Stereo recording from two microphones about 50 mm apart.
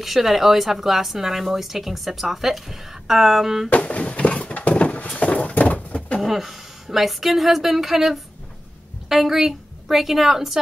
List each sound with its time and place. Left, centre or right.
0.0 s speech: centre
3.7 s a sound: left
6.2 s speech: centre